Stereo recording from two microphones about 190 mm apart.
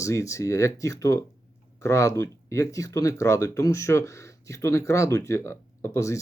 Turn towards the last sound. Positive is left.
turn(degrees=15)  # may be behind; listen again after turning